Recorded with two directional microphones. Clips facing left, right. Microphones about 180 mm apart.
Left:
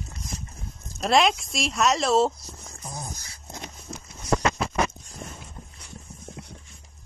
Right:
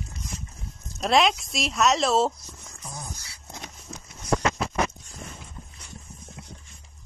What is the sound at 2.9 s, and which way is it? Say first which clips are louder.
Dog: left 2 dB; 40° left (ahead or behind).